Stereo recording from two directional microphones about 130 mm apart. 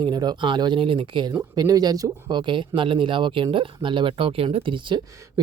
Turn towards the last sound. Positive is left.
turn(degrees=-40)  # may be behind; listen again after turning